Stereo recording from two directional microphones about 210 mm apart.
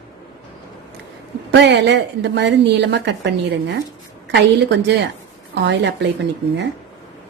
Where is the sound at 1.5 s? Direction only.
55° right (ahead or behind).